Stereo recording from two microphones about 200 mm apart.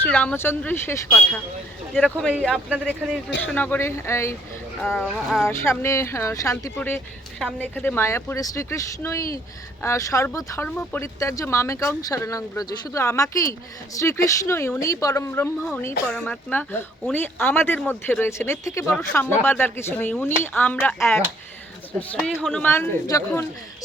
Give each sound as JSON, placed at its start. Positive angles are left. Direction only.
{"t": 0.0, "sound": "speech", "side_deg": 10}
{"t": 1.9, "sound": "speech", "side_deg": 0}
{"t": 3.4, "sound": "speech", "side_deg": 10}
{"t": 4.8, "sound": "speech", "side_deg": 0}
{"t": 5.5, "sound": "speech", "side_deg": 15}
{"t": 22.2, "sound": "speech", "side_deg": 0}
{"t": 22.7, "sound": "speech", "side_deg": 15}